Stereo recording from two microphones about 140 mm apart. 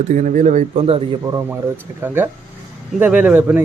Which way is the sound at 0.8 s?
40° right (ahead or behind).